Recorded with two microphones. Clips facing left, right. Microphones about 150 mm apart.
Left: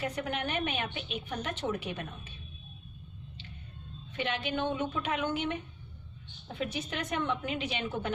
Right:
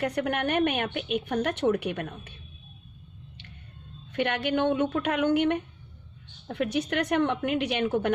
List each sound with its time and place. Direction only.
0.0 s a woman's voice: 65° right (ahead or behind)
4.1 s a woman's voice: 65° right (ahead or behind)